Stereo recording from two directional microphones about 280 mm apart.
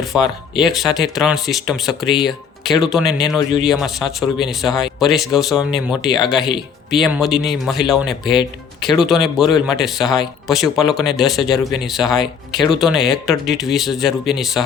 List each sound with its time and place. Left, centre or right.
0.2 s speech: centre
0.9 s speech: centre
6.1 s speech: centre
6.9 s speech: centre